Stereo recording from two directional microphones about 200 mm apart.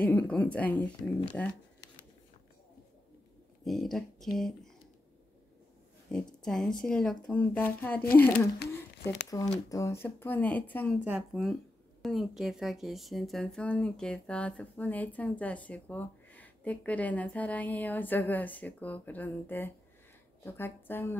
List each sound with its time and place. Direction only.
0.0 s speech: 5° left (ahead or behind)
3.6 s speech: centre (ahead or behind)
6.1 s speech: 5° left (ahead or behind)
11.1 s speech: 5° right (ahead or behind)